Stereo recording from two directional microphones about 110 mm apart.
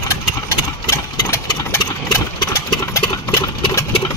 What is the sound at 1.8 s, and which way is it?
Engine, 40° left (ahead or behind).